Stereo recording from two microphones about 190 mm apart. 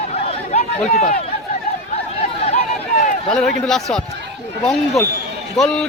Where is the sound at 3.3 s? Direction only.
Centre (ahead or behind).